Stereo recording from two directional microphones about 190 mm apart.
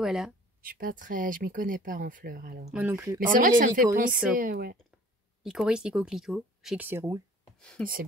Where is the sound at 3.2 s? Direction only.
45° right (ahead or behind).